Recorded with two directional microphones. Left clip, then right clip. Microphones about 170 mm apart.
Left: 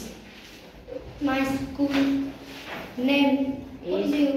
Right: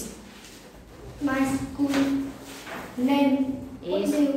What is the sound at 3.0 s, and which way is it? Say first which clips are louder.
Speech: left 1 dB; 10° left (ahead or behind).